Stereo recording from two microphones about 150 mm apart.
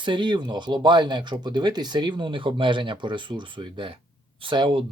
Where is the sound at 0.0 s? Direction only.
30° right (ahead or behind).